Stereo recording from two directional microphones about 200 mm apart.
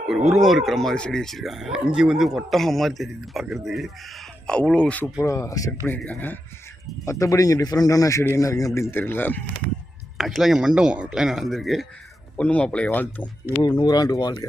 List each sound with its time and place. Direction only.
0.3 s a man's voice: centre (ahead or behind)
10.2 s a man's voice: centre (ahead or behind)
13.7 s speech: 20° left (ahead or behind)